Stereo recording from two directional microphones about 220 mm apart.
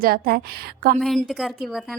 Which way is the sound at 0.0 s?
40° right (ahead or behind).